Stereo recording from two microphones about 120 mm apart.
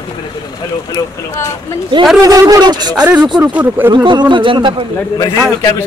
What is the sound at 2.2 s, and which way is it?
Speech, 30° right (ahead or behind).